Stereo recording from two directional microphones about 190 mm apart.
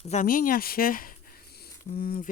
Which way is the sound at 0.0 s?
40° left (ahead or behind).